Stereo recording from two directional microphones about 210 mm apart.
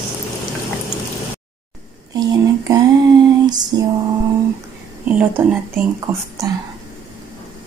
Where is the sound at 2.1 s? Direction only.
15° right (ahead or behind).